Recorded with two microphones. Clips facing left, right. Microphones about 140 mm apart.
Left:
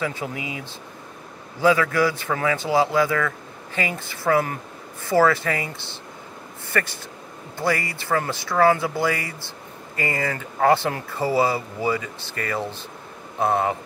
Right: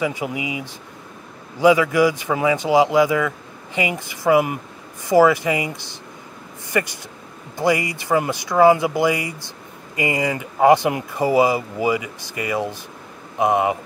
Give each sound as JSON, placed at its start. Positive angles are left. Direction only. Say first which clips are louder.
{"t": 0.0, "sound": "a man's voice", "louder": "right 4 dB", "side_deg": -15}